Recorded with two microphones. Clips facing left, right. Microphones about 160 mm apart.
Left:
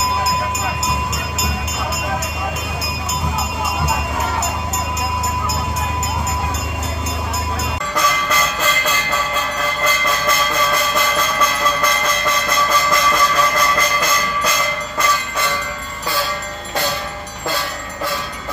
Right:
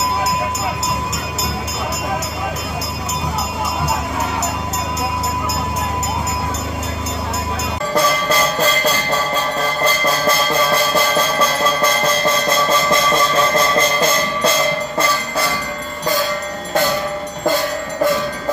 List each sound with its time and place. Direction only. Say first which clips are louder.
7.9 s music: right 4 dB; 30° right (ahead or behind)
17.5 s train: right 6 dB; 45° right (ahead or behind)